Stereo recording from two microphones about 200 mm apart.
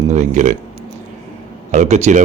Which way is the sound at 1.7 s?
35° right (ahead or behind).